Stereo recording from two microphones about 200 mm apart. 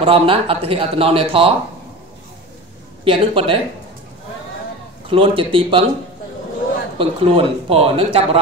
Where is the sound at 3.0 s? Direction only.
30° right (ahead or behind).